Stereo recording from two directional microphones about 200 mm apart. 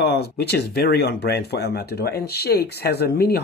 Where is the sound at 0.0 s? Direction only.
55° left (ahead or behind).